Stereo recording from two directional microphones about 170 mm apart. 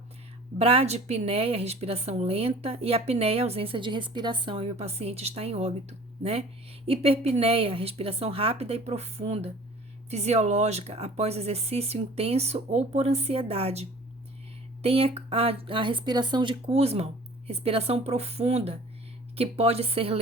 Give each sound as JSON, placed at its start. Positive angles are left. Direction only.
{"t": 0.6, "sound": "a woman's voice", "side_deg": -35}
{"t": 6.8, "sound": "a woman's voice", "side_deg": -35}